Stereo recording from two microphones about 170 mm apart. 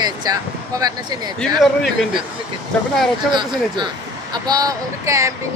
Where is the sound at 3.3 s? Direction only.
25° right (ahead or behind).